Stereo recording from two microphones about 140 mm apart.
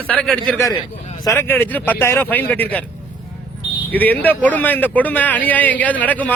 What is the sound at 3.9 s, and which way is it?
Speech, 10° left (ahead or behind).